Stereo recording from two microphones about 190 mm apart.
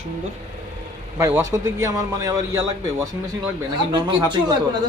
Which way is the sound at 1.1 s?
15° right (ahead or behind).